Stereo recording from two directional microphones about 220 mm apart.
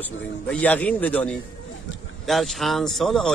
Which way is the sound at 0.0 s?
5° left (ahead or behind).